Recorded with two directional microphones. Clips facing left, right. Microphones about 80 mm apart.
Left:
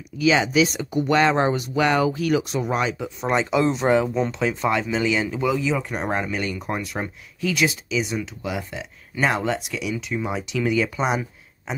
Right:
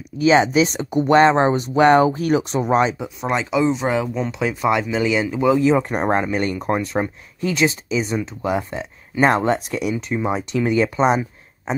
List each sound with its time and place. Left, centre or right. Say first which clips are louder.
0.2 s speech: right 4 dB; right
3.2 s speech: right 1 dB; centre
5.6 s speech: right 7 dB; right